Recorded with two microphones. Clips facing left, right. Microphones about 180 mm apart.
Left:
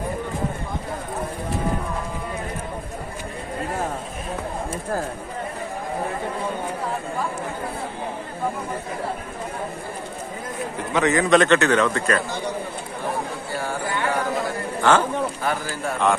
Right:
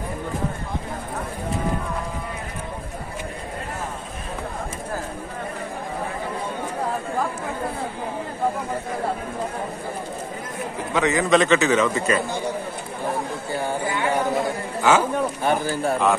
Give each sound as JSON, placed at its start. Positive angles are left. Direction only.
{"t": 10.8, "sound": "a man's voice", "side_deg": 0}
{"t": 13.5, "sound": "a sound", "side_deg": -20}
{"t": 14.8, "sound": "speech", "side_deg": -10}
{"t": 15.4, "sound": "speech", "side_deg": -25}